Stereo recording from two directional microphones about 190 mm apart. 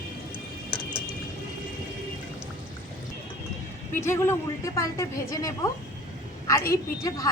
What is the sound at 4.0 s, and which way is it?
A woman's voice, 15° left (ahead or behind).